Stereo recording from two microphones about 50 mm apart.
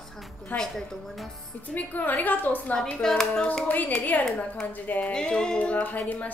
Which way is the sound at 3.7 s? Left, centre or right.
Left.